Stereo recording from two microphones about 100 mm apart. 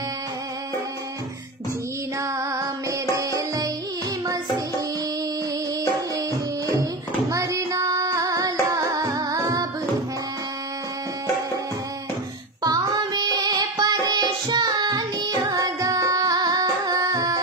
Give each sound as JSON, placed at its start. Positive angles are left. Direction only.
{"t": 2.3, "sound": "music", "side_deg": -35}
{"t": 5.9, "sound": "music", "side_deg": -35}
{"t": 12.6, "sound": "music", "side_deg": -35}